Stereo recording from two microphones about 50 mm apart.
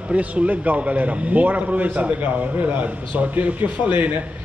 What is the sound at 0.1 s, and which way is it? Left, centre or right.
A man's voice, right.